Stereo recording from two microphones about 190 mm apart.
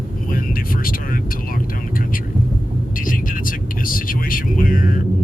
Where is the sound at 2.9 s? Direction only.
45° left (ahead or behind).